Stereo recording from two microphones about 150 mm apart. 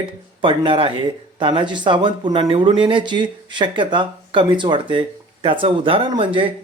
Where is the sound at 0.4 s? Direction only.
35° right (ahead or behind).